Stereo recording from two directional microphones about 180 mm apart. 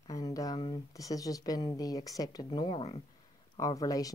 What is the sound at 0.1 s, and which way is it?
Speech, 20° left (ahead or behind).